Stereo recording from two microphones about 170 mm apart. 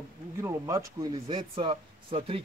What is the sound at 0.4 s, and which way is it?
Speech, 15° right (ahead or behind).